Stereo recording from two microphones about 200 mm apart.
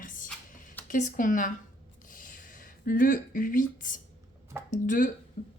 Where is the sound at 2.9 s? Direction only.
45° left (ahead or behind).